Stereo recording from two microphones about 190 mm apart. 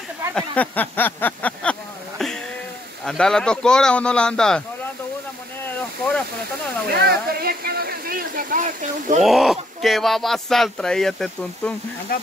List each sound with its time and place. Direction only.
0.3 s a sound: 5° left (ahead or behind)
3.1 s speech: 5° left (ahead or behind)
6.9 s speech: 55° right (ahead or behind)
9.2 s speech: centre (ahead or behind)